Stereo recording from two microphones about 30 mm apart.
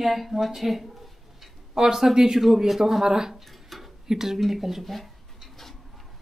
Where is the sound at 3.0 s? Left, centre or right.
Right.